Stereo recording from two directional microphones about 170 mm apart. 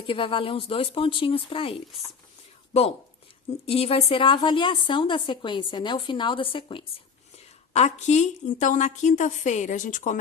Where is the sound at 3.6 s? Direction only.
35° left (ahead or behind).